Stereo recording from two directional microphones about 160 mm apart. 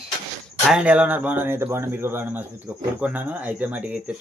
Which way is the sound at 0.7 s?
5° right (ahead or behind).